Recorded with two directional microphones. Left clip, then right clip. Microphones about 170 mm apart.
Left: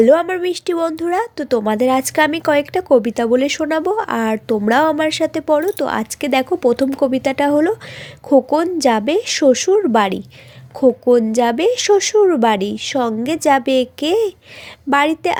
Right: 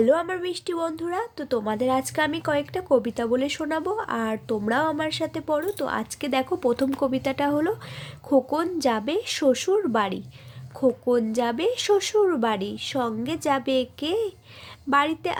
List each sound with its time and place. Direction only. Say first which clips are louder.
0.0 s speech: left 9 dB; 30° left (ahead or behind)